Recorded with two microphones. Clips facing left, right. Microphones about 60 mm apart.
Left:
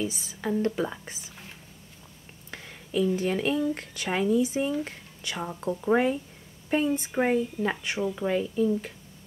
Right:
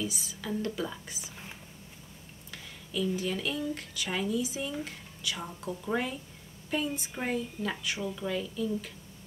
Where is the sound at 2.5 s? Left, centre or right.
Left.